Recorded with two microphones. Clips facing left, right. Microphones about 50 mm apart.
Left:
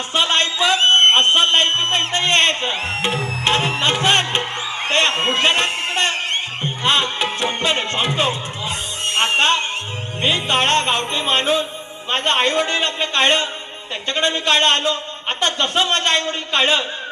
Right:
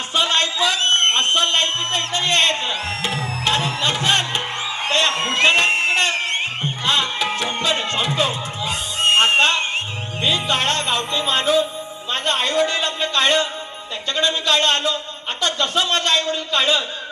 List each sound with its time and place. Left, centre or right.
0.1 s a sound: left
5.6 s a sound: right
5.9 s music: left
9.0 s music: right
9.4 s music: left
12.1 s speech: left